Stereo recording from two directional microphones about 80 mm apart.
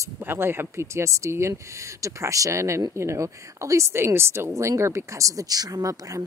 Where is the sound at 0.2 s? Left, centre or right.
Right.